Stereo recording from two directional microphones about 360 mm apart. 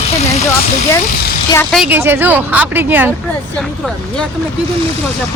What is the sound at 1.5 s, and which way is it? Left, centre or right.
Speech, centre.